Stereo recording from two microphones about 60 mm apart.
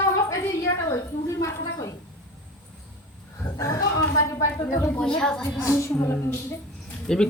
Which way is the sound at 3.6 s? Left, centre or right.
Left.